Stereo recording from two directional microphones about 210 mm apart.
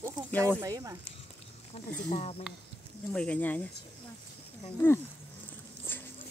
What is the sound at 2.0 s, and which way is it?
Speech, 30° left (ahead or behind).